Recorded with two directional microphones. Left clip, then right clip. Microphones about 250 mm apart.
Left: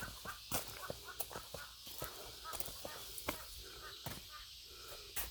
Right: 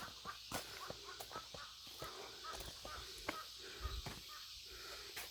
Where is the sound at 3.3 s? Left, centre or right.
Left.